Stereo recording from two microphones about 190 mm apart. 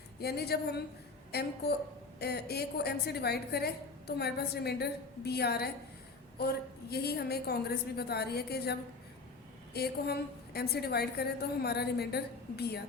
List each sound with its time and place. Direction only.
0.2 s a woman's voice: 55° left (ahead or behind)